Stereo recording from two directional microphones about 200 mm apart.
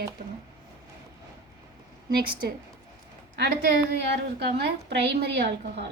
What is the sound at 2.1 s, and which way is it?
Speech, 50° right (ahead or behind).